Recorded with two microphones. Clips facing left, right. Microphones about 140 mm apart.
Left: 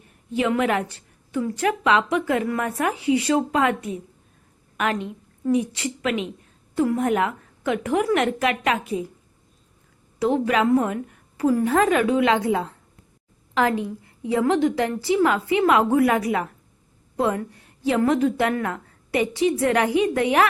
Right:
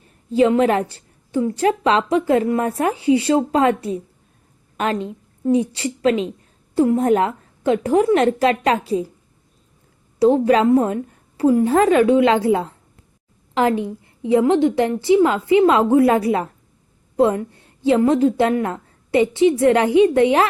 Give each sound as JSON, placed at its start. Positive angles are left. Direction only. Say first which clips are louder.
{"t": 0.3, "sound": "a woman's voice", "louder": "right 6 dB", "side_deg": -30}
{"t": 10.2, "sound": "a woman's voice", "louder": "right 6 dB", "side_deg": -30}